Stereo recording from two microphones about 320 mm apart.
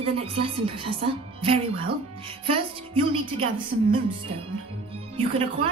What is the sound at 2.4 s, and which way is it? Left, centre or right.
A woman's voice, centre.